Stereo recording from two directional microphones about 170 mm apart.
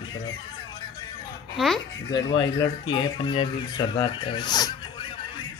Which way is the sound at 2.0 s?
25° left (ahead or behind).